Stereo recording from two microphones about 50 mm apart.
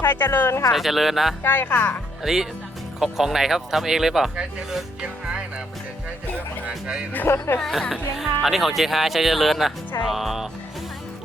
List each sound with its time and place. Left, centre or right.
0.0 s speech: left
0.7 s speech: centre
1.5 s speech: left
2.2 s speech: centre
5.0 s music: centre
7.3 s speech: left
7.6 s speech: centre